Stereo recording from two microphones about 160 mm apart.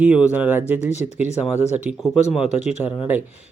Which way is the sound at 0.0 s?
5° right (ahead or behind).